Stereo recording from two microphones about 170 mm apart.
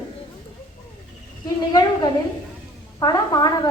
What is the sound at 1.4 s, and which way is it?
A woman's voice, 25° left (ahead or behind).